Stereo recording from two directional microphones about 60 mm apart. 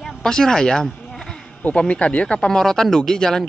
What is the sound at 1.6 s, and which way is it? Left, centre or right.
Speech, left.